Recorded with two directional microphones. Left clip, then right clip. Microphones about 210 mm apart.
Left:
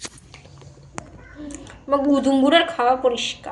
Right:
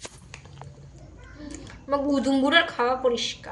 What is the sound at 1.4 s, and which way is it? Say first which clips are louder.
A woman's voice: left 5 dB; 25° right (ahead or behind).